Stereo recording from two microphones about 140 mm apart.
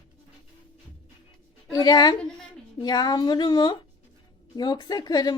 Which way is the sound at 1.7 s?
30° left (ahead or behind).